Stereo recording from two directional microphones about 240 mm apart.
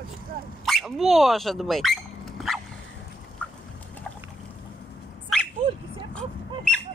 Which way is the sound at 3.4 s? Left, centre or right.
Centre.